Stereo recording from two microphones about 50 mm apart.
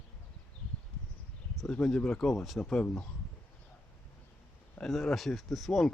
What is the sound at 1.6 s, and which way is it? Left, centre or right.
Speech, centre.